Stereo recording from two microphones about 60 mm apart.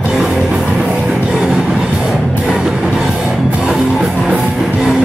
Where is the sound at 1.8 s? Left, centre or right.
Centre.